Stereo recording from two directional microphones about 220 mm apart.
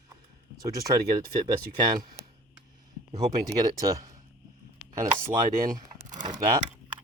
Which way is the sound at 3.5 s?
15° right (ahead or behind).